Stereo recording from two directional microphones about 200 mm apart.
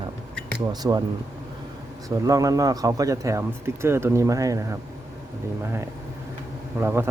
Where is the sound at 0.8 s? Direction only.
15° right (ahead or behind).